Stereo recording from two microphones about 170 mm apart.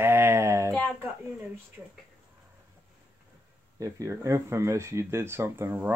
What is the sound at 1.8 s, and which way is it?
Speech, 15° right (ahead or behind).